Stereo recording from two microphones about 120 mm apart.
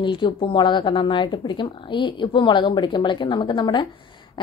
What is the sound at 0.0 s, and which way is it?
A woman's voice, 45° left (ahead or behind).